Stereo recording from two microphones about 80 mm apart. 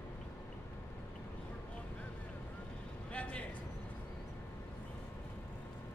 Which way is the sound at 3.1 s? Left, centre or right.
Centre.